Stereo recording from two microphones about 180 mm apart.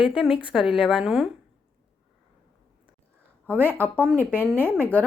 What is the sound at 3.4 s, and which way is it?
Speech, 10° left (ahead or behind).